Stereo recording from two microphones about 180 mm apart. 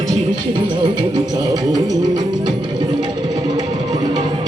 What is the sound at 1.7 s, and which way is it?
Music, 20° right (ahead or behind).